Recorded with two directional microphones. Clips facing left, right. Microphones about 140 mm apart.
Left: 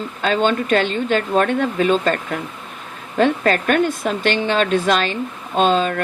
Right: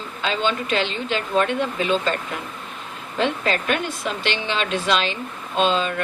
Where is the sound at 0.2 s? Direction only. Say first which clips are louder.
Left 5 dB; 50° left (ahead or behind).